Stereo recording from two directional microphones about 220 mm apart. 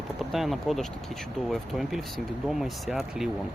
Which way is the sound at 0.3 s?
Centre (ahead or behind).